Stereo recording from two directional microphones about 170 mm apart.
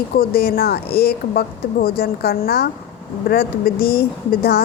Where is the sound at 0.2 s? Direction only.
65° left (ahead or behind).